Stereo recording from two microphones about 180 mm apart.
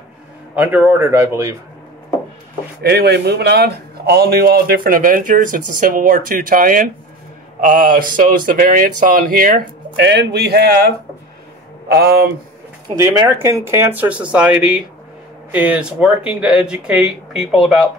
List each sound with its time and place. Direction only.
0.6 s speech: 10° right (ahead or behind)
2.8 s speech: 65° right (ahead or behind)
10.0 s speech: 65° right (ahead or behind)
11.9 s speech: 60° right (ahead or behind)
13.0 s speech: 15° right (ahead or behind)